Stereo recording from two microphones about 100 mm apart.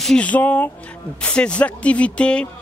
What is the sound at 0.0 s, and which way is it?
Speech, 10° left (ahead or behind).